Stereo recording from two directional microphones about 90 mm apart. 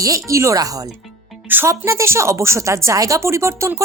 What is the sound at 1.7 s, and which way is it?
A woman's voice, 35° right (ahead or behind).